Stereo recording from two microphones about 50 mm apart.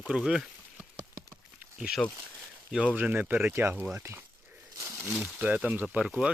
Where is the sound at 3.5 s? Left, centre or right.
Right.